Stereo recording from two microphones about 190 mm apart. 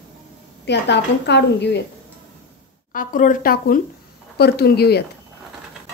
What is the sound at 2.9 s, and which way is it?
A woman's voice, 45° left (ahead or behind).